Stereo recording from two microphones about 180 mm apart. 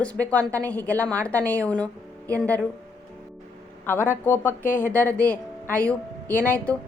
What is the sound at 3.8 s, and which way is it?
A woman's voice, 10° left (ahead or behind).